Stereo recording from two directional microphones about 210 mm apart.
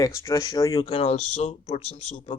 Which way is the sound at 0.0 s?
15° left (ahead or behind).